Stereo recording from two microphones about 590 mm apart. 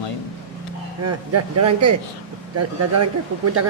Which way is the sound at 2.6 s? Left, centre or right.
Right.